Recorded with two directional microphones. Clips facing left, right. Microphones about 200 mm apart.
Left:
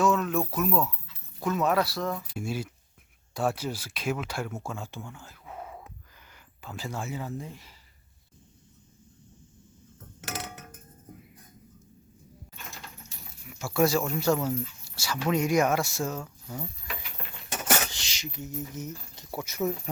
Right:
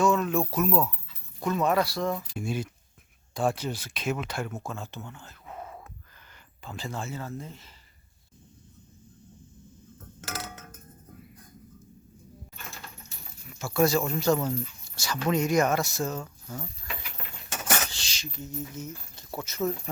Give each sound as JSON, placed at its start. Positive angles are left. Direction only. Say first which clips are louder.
{"t": 0.0, "sound": "music", "louder": "right 1 dB", "side_deg": 0}
{"t": 0.5, "sound": "speech", "louder": "right 1 dB", "side_deg": 0}
{"t": 10.2, "sound": "creak", "louder": "left 1 dB", "side_deg": 20}
{"t": 13.5, "sound": "keys jangling", "louder": "even", "side_deg": 5}
{"t": 14.2, "sound": "speech", "louder": "right 1 dB", "side_deg": 5}
{"t": 17.9, "sound": "speech", "louder": "left 1 dB", "side_deg": 20}